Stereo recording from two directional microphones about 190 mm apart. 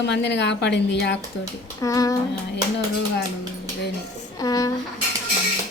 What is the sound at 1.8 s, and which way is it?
Speech, 20° left (ahead or behind).